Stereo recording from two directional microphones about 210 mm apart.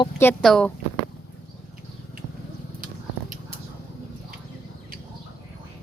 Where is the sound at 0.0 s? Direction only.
10° left (ahead or behind).